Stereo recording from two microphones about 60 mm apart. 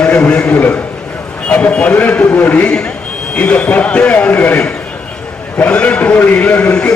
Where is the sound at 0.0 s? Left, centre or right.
Centre.